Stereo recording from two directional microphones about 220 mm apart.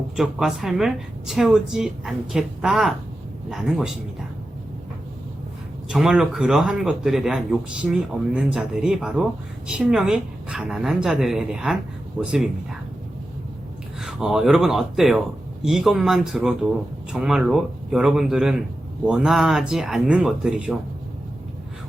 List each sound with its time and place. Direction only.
0.2 s speech: centre (ahead or behind)
5.9 s speech: centre (ahead or behind)
14.0 s speech: 5° right (ahead or behind)